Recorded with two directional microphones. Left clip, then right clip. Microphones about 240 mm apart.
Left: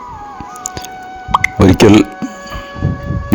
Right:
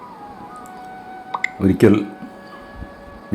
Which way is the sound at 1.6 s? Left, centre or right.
Left.